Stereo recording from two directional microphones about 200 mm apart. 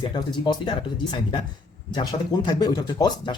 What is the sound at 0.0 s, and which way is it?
Speech, 25° left (ahead or behind).